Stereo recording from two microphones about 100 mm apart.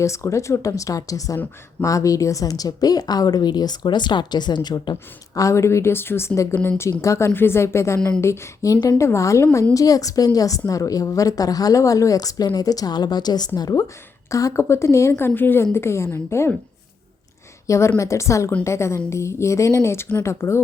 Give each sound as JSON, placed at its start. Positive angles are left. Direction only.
{"t": 0.0, "sound": "a woman's voice", "side_deg": 30}
{"t": 17.7, "sound": "a woman's voice", "side_deg": 30}